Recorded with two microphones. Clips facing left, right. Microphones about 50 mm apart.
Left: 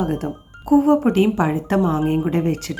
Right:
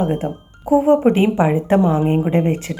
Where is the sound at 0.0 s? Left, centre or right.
Right.